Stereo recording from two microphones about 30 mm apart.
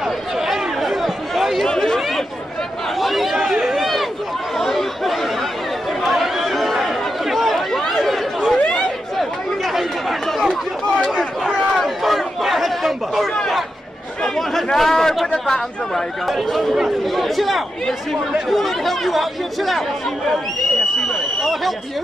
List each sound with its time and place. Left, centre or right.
0.5 s chatter: centre
1.7 s chatter: centre
3.0 s chatter: centre
3.5 s run: centre
4.6 s chatter: centre
12.0 s chatter: centre
14.2 s a man's voice: centre
17.0 s speech: centre
21.1 s a sound: centre